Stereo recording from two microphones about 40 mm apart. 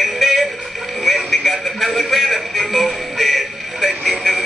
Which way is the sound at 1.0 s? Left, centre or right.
Centre.